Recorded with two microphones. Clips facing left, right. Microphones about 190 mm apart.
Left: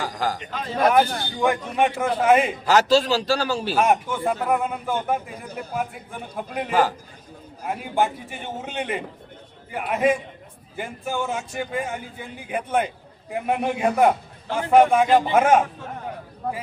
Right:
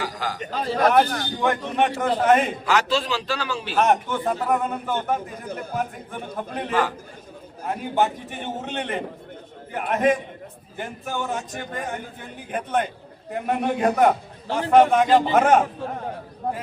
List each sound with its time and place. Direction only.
0.0 s a sound: 45° left (ahead or behind)
0.3 s a man's voice: 35° right (ahead or behind)
0.9 s speech: 10° left (ahead or behind)
2.6 s a man's voice: 40° left (ahead or behind)
3.8 s speech: 10° left (ahead or behind)
7.6 s speech: 10° left (ahead or behind)
14.4 s a man's voice: 30° right (ahead or behind)
14.7 s speech: 10° left (ahead or behind)